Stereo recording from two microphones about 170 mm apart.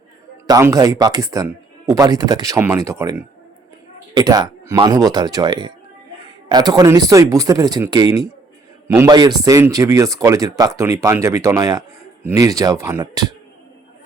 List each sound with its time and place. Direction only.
0.4 s speech: 20° right (ahead or behind)